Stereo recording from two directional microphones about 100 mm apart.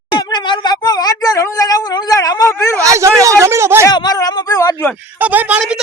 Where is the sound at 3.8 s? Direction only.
40° left (ahead or behind).